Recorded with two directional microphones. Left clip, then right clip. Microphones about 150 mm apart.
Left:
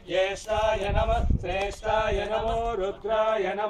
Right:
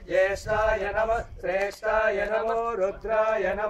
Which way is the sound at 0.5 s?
10° right (ahead or behind).